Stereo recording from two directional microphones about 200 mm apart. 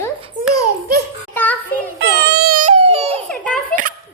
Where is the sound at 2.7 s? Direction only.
30° right (ahead or behind).